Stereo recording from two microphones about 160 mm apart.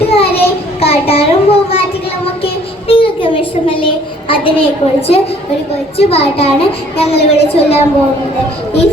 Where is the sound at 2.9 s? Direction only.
35° left (ahead or behind).